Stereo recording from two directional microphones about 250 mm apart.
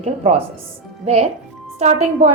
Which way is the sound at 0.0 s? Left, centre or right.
Right.